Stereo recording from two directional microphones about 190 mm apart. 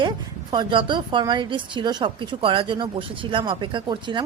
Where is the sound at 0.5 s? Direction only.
25° right (ahead or behind).